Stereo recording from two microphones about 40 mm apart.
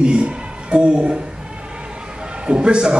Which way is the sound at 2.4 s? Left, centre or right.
Right.